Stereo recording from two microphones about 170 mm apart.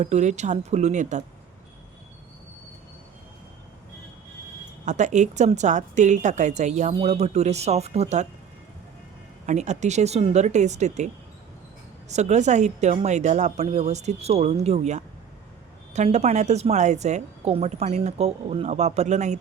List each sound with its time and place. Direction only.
0.0 s a woman's voice: 45° right (ahead or behind)
4.9 s a woman's voice: 45° right (ahead or behind)
9.5 s a woman's voice: 45° right (ahead or behind)